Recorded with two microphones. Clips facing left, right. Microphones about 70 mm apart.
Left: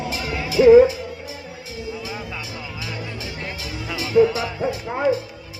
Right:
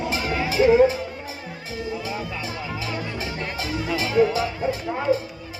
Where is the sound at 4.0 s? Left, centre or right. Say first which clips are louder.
Left 4 dB; right.